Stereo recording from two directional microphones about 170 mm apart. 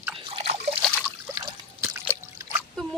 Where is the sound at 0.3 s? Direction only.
40° right (ahead or behind).